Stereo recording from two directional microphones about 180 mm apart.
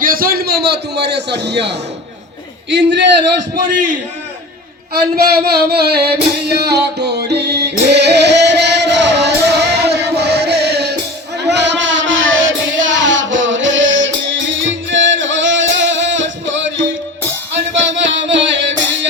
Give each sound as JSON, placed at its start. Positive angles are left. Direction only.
{"t": 0.0, "sound": "a man's voice", "side_deg": -50}
{"t": 2.6, "sound": "a man's voice", "side_deg": -80}
{"t": 3.5, "sound": "a man's voice", "side_deg": -45}
{"t": 5.7, "sound": "music", "side_deg": -65}
{"t": 11.3, "sound": "child singing", "side_deg": -70}
{"t": 17.9, "sound": "music", "side_deg": -90}